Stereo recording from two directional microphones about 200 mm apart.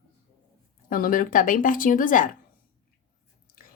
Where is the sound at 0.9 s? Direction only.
45° left (ahead or behind).